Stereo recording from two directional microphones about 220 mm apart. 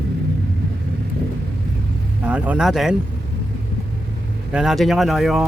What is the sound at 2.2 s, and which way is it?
Speech, 5° right (ahead or behind).